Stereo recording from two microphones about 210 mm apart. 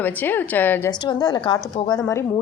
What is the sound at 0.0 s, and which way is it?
Speech, 10° left (ahead or behind).